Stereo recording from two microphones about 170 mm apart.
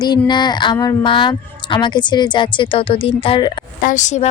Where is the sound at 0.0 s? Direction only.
25° left (ahead or behind).